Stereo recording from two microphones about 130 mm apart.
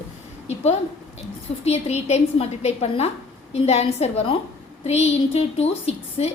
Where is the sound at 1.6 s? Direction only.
55° left (ahead or behind).